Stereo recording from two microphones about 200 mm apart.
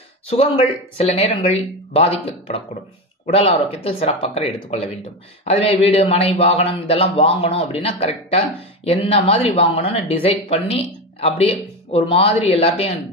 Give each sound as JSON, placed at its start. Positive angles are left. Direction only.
{"t": 0.3, "sound": "speech", "side_deg": 30}